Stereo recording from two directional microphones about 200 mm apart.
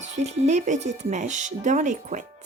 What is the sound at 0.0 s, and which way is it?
Speech, 35° right (ahead or behind).